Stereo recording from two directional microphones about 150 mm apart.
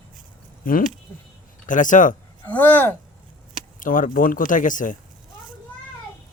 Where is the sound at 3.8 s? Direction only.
65° left (ahead or behind).